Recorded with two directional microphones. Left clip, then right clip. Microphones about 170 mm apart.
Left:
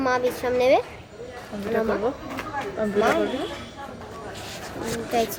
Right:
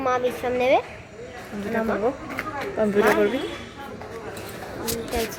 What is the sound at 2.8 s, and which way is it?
Speech, 30° right (ahead or behind).